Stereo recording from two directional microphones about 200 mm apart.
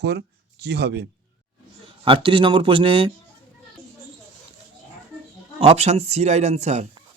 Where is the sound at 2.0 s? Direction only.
25° right (ahead or behind).